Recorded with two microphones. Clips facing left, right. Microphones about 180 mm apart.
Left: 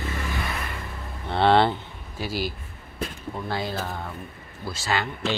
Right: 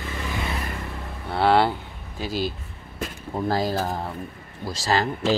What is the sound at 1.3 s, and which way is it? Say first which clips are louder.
Speech: even; 5° right (ahead or behind).